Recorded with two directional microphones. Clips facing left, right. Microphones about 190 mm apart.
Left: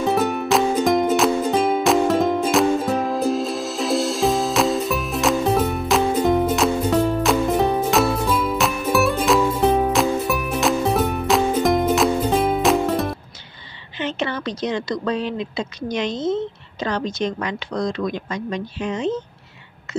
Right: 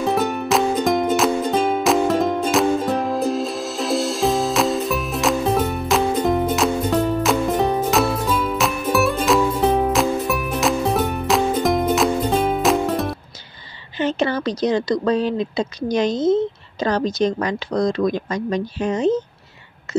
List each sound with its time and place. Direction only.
0.0 s music: centre (ahead or behind)
13.9 s speech: 40° right (ahead or behind)